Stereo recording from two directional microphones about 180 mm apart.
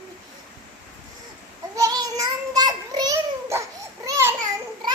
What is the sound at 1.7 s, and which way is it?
Child singing, 20° right (ahead or behind).